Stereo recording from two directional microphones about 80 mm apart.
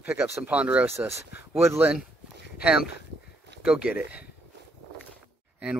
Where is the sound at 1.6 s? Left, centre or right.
Right.